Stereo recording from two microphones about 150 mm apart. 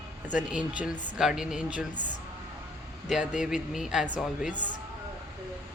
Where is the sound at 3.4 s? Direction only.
5° right (ahead or behind).